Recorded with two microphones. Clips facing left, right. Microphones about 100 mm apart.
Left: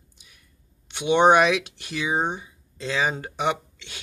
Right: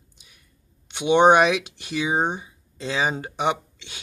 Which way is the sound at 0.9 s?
5° right (ahead or behind).